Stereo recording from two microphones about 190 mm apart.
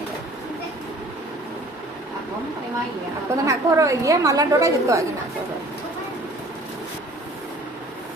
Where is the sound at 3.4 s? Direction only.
15° right (ahead or behind).